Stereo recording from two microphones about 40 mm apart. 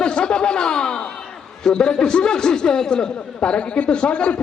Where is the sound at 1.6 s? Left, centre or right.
Centre.